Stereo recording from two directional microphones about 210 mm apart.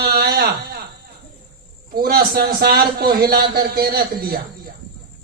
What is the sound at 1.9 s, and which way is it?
A man's voice, 45° right (ahead or behind).